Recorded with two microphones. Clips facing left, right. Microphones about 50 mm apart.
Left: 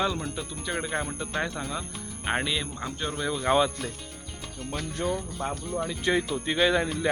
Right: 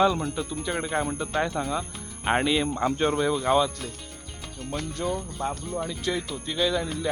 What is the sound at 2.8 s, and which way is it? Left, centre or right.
Speech, centre.